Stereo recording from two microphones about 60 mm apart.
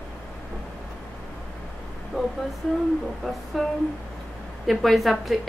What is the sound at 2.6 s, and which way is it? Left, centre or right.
Speech, centre.